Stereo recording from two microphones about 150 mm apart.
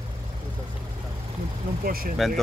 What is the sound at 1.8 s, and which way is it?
Speech, 80° right.